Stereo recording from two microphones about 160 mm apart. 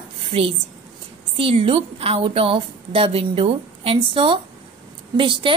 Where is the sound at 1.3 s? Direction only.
35° right (ahead or behind).